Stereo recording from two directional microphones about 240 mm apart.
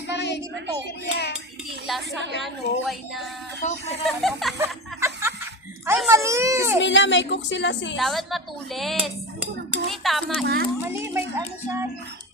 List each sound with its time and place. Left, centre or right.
0.1 s a sound: left
1.9 s a woman's voice: centre
3.6 s speech: left
4.0 s a woman's voice: centre
4.5 s chuckle: centre
5.8 s speech: centre
6.7 s a woman's voice: left
7.9 s a woman's voice: centre
10.4 s a child's voice: right
10.8 s speech: centre